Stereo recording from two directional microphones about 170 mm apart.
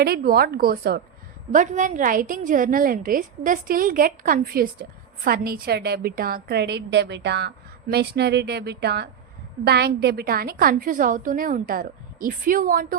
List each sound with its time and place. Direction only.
0.0 s a woman's voice: 65° right (ahead or behind)
1.5 s a woman's voice: 45° right (ahead or behind)